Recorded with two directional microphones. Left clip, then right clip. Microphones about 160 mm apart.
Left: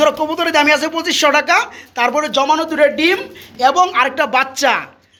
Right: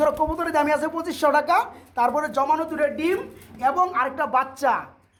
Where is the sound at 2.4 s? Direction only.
15° left (ahead or behind).